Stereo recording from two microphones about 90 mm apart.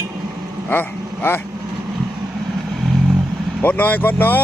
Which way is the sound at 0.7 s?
25° left (ahead or behind).